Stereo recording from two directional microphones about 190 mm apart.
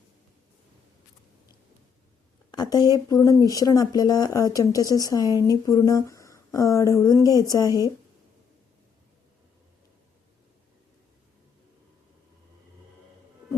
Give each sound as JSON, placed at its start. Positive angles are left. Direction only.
{"t": 2.5, "sound": "speech", "side_deg": 20}